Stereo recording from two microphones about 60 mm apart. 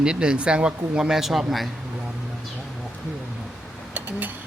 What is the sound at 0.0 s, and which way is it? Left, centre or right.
Speech, centre.